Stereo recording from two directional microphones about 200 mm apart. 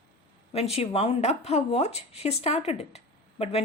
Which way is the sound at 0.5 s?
30° left (ahead or behind).